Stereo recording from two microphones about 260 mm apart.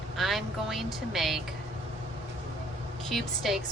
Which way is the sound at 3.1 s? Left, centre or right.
Centre.